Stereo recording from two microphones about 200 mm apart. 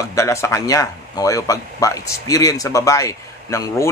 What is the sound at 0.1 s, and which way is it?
Speech, 15° left (ahead or behind).